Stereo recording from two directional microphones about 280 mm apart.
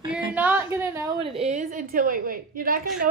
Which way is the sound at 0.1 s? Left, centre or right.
Centre.